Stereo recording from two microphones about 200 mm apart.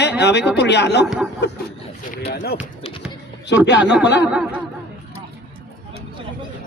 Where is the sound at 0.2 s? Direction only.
60° left (ahead or behind).